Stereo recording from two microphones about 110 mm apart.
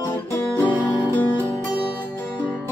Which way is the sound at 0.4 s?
20° left (ahead or behind).